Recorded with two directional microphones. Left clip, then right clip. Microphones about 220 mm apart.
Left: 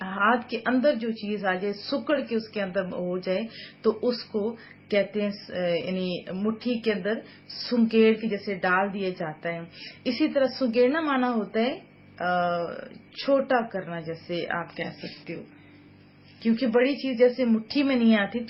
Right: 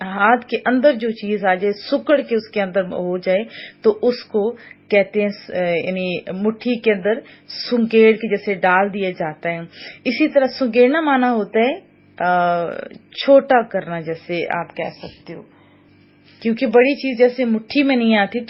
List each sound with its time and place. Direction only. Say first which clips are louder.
0.0 s a woman's voice: right 8 dB; 30° right (ahead or behind)
16.4 s a woman's voice: right 9 dB; 35° right (ahead or behind)